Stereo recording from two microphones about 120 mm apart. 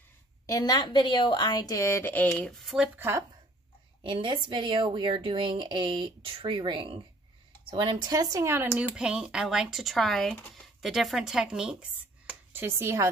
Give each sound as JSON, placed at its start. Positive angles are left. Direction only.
{"t": 0.5, "sound": "a woman's voice", "side_deg": 35}
{"t": 2.5, "sound": "speech", "side_deg": 0}
{"t": 3.0, "sound": "a woman's voice", "side_deg": -25}
{"t": 4.0, "sound": "a woman's voice", "side_deg": -45}
{"t": 8.7, "sound": "speech", "side_deg": -10}
{"t": 12.6, "sound": "a woman's voice", "side_deg": -20}